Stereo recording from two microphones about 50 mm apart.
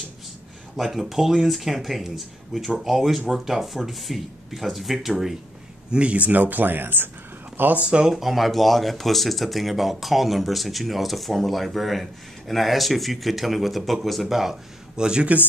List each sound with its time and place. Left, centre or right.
0.7 s speech: centre
5.9 s speech: right
7.8 s speech: right
8.1 s speech: centre